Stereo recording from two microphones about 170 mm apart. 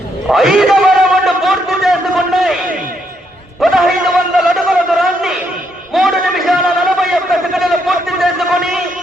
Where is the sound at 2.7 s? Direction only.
55° right (ahead or behind).